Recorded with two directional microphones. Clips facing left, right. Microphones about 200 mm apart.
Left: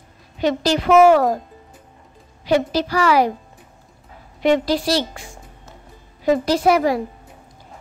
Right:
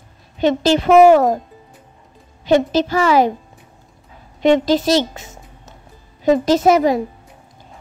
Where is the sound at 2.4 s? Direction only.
25° right (ahead or behind).